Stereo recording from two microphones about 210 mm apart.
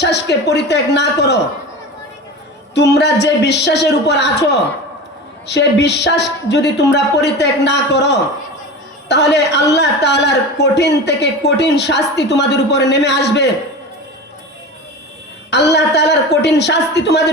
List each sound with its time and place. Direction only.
0.0 s a man's voice: 55° left (ahead or behind)
2.7 s a man's voice: 55° left (ahead or behind)
15.4 s a man's voice: 55° left (ahead or behind)